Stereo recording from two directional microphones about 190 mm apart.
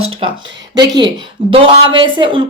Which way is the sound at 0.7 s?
20° right (ahead or behind).